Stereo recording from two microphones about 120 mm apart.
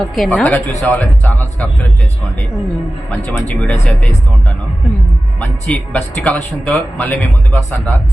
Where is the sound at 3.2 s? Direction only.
10° left (ahead or behind).